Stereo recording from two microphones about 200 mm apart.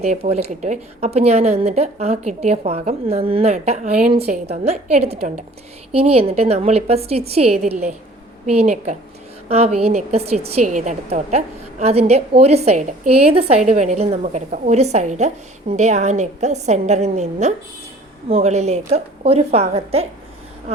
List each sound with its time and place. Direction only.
0.0 s a woman's voice: 30° right (ahead or behind)